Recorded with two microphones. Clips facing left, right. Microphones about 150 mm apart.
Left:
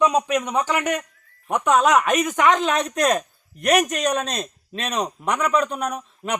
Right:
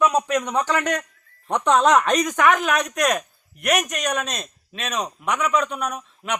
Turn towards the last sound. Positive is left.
turn(degrees=35)  # may be behind; listen again after turning